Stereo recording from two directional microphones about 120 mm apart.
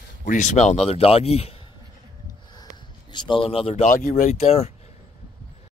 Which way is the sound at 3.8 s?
80° left.